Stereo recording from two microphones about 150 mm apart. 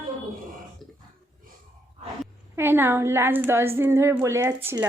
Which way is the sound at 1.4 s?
70° right (ahead or behind).